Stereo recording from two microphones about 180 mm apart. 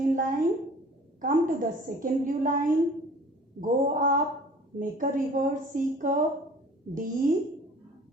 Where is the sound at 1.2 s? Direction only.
50° right (ahead or behind).